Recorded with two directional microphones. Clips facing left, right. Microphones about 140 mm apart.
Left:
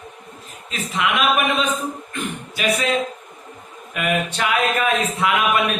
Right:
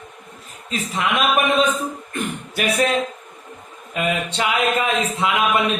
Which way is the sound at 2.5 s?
60° right (ahead or behind).